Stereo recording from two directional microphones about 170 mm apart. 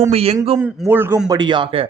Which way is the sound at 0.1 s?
35° right (ahead or behind).